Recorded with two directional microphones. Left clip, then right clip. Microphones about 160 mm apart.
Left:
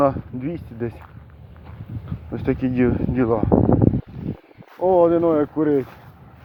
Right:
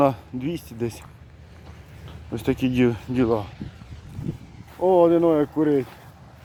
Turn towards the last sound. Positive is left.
turn(degrees=-25)  # may be behind; listen again after turning